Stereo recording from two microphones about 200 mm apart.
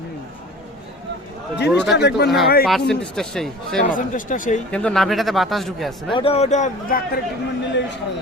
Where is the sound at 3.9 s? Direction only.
40° left (ahead or behind).